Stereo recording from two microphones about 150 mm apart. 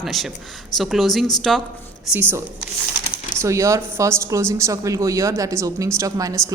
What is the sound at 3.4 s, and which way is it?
A woman's voice, 20° right (ahead or behind).